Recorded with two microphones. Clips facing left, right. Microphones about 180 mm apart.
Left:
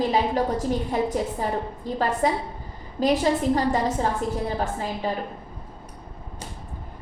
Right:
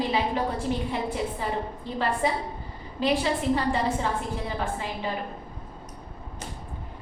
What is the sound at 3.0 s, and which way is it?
A woman's voice, 40° left (ahead or behind).